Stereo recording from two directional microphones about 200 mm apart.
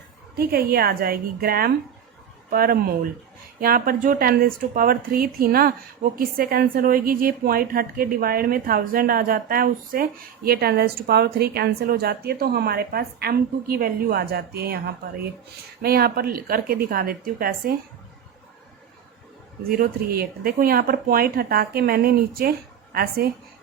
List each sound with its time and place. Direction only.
0.7 s speech: 50° right (ahead or behind)
19.6 s speech: 45° right (ahead or behind)